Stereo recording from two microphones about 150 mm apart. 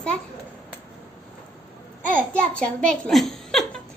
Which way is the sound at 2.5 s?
5° left (ahead or behind).